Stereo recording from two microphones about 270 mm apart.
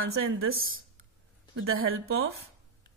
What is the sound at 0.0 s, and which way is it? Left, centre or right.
A woman's voice, right.